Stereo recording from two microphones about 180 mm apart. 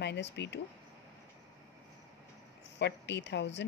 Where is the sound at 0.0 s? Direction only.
75° left (ahead or behind).